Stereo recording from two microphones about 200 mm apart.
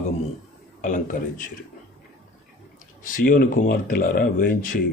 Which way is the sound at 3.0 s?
45° left (ahead or behind).